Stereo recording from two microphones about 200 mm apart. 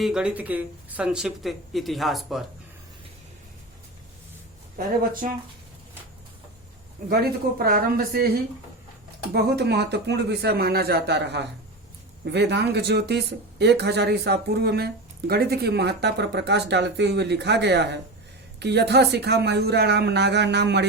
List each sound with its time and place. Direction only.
0.0 s speech: 5° right (ahead or behind)
5.2 s speech: 40° right (ahead or behind)
7.1 s a man's voice: 50° right (ahead or behind)